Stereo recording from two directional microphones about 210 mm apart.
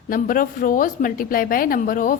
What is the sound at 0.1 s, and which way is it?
A woman's voice, 40° left (ahead or behind).